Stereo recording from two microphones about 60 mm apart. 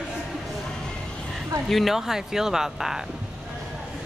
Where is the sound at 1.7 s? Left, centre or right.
Centre.